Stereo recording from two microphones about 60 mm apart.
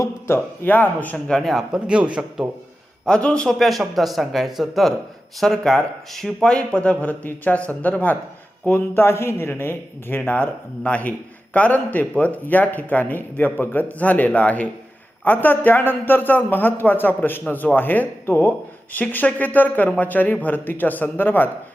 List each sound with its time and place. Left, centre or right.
0.6 s a man's voice: left
1.1 s speech: centre
1.5 s speech: centre
1.9 s speech: centre
3.1 s speech: centre
3.6 s a man's voice: centre; by 21.5 s left